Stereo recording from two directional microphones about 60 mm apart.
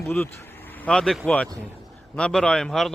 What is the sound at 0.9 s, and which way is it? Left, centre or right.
A man's voice, centre.